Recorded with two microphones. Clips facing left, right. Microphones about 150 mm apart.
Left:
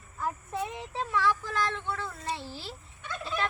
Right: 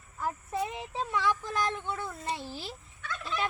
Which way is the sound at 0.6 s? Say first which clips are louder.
Even; 10° right (ahead or behind).